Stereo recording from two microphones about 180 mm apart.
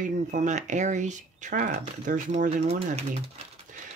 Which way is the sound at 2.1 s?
40° right (ahead or behind).